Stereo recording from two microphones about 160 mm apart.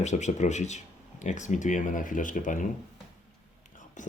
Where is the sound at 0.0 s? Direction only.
45° left (ahead or behind).